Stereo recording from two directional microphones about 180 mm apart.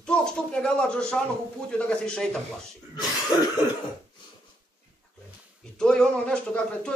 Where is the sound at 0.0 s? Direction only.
5° left (ahead or behind).